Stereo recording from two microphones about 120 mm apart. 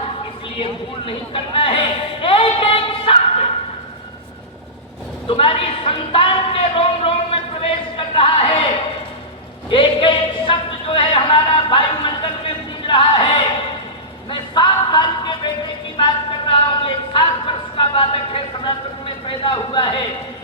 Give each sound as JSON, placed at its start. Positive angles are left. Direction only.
{"t": 0.6, "sound": "speech", "side_deg": 45}
{"t": 5.3, "sound": "a woman's voice", "side_deg": 45}
{"t": 7.6, "sound": "a sound", "side_deg": 45}
{"t": 9.6, "sound": "a man's voice", "side_deg": 45}
{"t": 12.9, "sound": "music", "side_deg": 45}
{"t": 14.3, "sound": "a sound", "side_deg": 40}